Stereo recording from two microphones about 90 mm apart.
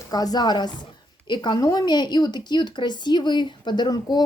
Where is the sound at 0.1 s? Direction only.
45° left (ahead or behind).